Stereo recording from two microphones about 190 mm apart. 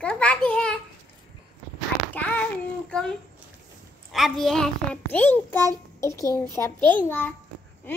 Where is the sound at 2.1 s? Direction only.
10° left (ahead or behind).